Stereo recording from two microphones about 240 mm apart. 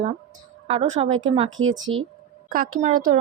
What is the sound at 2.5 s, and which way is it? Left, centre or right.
Speech, right.